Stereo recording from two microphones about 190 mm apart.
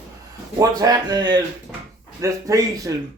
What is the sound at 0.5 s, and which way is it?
Speech, 20° right (ahead or behind).